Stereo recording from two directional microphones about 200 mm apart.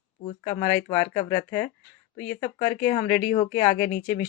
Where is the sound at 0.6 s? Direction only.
10° left (ahead or behind).